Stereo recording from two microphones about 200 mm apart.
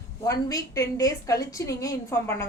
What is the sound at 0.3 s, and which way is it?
A woman's voice, 15° left (ahead or behind).